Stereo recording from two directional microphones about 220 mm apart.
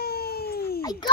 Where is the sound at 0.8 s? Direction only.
15° left (ahead or behind).